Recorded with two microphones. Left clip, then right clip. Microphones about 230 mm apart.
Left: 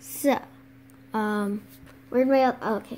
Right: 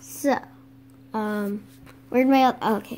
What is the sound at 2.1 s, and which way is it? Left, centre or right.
Speech, right.